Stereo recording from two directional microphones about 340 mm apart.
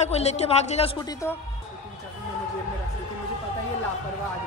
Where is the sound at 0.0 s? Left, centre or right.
Centre.